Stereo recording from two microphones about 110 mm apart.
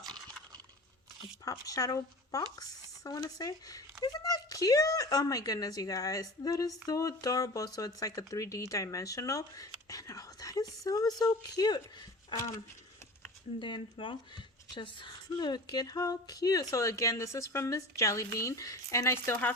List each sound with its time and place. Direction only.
1.5 s speech: 30° left (ahead or behind)
13.6 s speech: 45° left (ahead or behind); by 19.5 s 20° left (ahead or behind)